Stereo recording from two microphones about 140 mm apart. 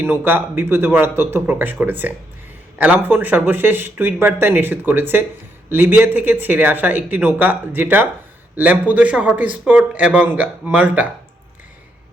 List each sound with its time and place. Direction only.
0.0 s speech: 15° right (ahead or behind)